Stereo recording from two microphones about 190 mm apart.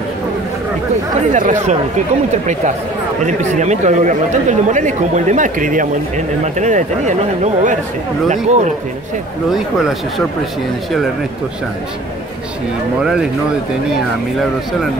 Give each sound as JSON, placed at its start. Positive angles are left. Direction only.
{"t": 1.3, "sound": "speech", "side_deg": -40}
{"t": 3.3, "sound": "speech", "side_deg": -40}
{"t": 9.5, "sound": "speech", "side_deg": 0}